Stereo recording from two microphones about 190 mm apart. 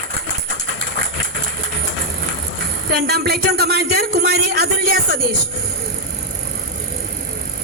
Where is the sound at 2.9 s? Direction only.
55° right (ahead or behind).